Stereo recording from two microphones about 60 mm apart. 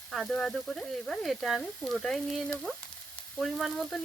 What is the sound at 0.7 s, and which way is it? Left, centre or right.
Frying, centre.